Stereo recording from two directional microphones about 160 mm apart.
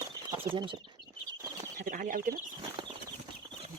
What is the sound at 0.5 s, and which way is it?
Speech, 30° right (ahead or behind).